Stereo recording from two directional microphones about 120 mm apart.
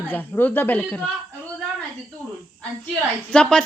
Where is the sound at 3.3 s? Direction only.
5° left (ahead or behind).